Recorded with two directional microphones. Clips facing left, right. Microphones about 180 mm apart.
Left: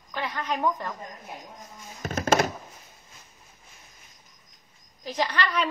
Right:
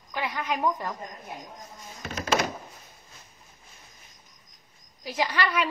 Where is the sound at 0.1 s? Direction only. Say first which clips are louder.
Even; 10° right (ahead or behind).